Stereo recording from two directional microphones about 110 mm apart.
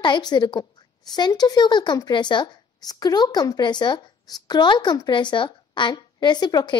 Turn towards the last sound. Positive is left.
turn(degrees=40)  # may be behind; listen again after turning